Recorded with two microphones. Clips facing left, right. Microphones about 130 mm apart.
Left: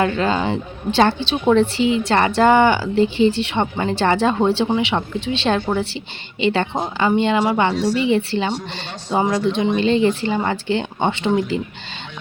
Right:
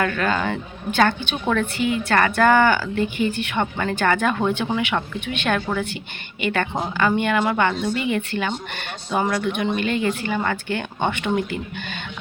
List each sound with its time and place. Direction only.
0.0 s a woman's voice: 25° left (ahead or behind)